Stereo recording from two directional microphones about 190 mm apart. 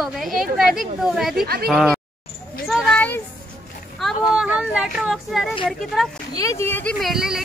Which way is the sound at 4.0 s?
5° right (ahead or behind).